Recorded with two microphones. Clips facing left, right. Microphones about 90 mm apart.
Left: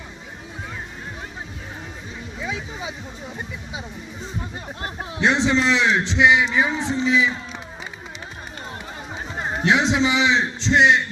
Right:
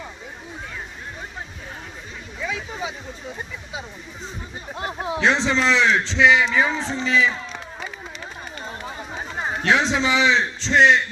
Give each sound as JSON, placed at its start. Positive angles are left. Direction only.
{"t": 4.8, "sound": "speech", "side_deg": -20}
{"t": 5.2, "sound": "a man's voice", "side_deg": 15}
{"t": 9.6, "sound": "a man's voice", "side_deg": 15}